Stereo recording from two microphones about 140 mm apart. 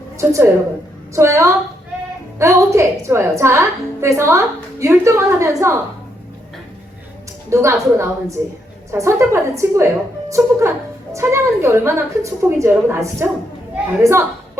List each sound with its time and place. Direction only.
0.2 s a woman's voice: 20° right (ahead or behind)
7.5 s a woman's voice: 20° right (ahead or behind)